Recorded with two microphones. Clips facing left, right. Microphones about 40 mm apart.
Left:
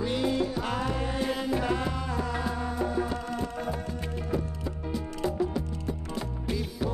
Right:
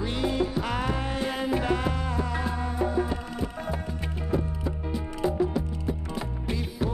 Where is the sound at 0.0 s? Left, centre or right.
Centre.